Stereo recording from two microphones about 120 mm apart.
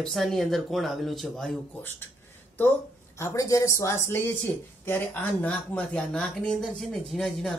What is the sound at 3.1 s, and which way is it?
Speech, 25° left (ahead or behind).